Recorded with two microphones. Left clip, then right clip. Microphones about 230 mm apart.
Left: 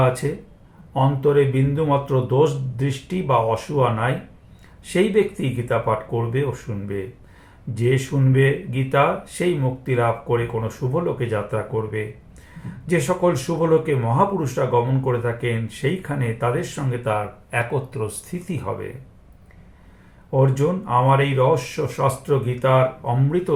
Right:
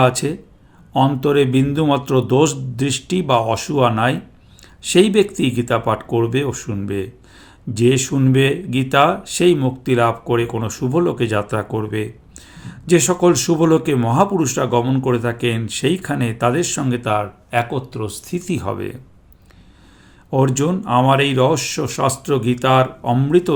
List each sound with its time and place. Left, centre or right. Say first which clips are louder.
0.2 s speech: right 3 dB; right
20.3 s speech: right 2 dB; right